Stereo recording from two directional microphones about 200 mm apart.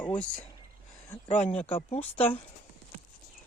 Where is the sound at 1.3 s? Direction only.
35° left (ahead or behind).